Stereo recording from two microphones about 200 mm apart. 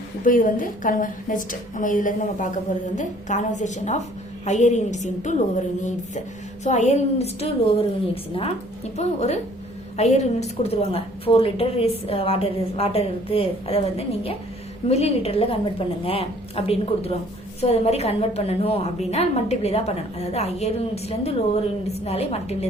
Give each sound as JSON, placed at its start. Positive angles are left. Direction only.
{"t": 0.3, "sound": "a woman's voice", "side_deg": 40}
{"t": 14.8, "sound": "a woman's voice", "side_deg": 30}